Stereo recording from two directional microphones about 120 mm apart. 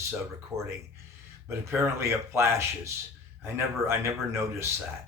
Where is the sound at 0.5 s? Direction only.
25° right (ahead or behind).